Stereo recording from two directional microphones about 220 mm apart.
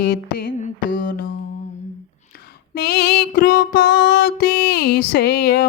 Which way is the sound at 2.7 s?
45° left (ahead or behind).